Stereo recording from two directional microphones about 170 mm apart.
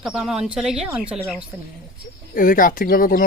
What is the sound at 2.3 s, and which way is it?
Speech, 55° left (ahead or behind).